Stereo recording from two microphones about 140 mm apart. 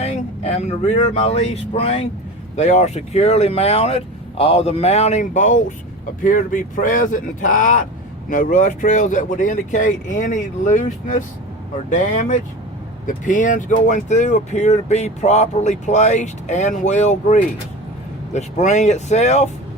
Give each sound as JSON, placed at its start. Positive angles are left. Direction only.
{"t": 0.0, "sound": "speech", "side_deg": 50}